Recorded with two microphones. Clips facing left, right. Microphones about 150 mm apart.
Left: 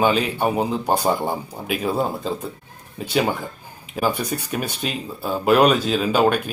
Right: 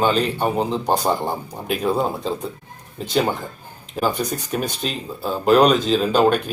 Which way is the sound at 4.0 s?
10° left (ahead or behind).